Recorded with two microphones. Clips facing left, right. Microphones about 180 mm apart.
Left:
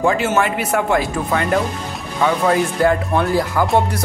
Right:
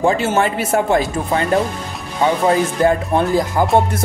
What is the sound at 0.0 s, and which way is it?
Speech, 30° right (ahead or behind).